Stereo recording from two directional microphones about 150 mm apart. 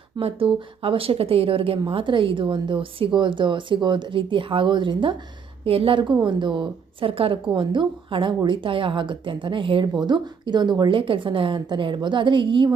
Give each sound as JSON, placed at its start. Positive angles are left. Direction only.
{"t": 0.2, "sound": "a woman's voice", "side_deg": -40}